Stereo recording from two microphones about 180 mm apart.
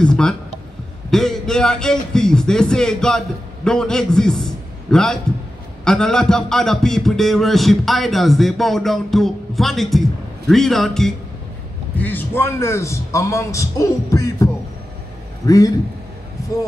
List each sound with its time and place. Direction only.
0.0 s a man's voice: 5° left (ahead or behind)